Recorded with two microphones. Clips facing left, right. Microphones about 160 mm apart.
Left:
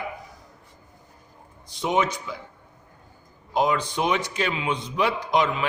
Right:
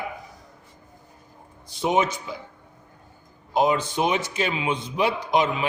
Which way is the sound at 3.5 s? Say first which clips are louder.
Right 2 dB; 25° right (ahead or behind).